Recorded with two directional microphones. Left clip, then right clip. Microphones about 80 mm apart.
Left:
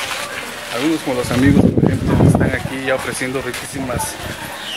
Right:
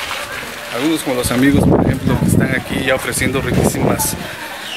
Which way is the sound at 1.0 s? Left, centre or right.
Right.